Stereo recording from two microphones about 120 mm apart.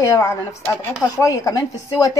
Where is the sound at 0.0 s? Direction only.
25° left (ahead or behind).